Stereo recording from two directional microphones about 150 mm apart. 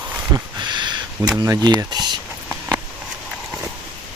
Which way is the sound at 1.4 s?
25° right (ahead or behind).